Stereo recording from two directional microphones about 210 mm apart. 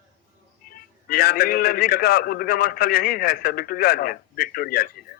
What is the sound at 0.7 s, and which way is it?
A man's voice, 50° left (ahead or behind).